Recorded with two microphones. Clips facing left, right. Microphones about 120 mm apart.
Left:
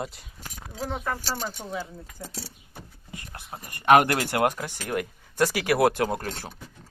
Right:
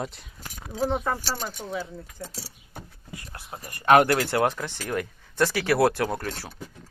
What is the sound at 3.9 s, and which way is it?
Speech, 15° left (ahead or behind).